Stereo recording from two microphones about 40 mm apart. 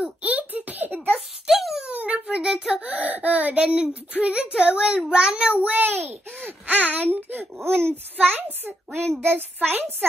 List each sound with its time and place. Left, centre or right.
0.0 s a sound: right
1.5 s a sound: centre
1.9 s a sound: right
2.3 s child singing: centre
2.9 s baby cry: right
4.2 s a child's voice: right
5.5 s a child's voice: right
7.5 s speech: right
8.2 s a child's voice: right